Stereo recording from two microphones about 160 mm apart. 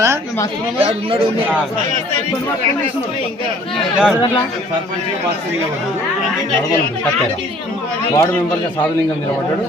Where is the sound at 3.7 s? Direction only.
5° right (ahead or behind).